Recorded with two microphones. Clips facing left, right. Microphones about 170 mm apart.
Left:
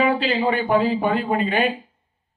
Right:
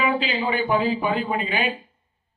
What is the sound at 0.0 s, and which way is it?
Speech, 50° left (ahead or behind).